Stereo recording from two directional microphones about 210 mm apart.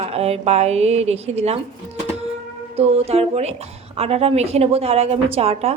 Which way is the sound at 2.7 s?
30° right (ahead or behind).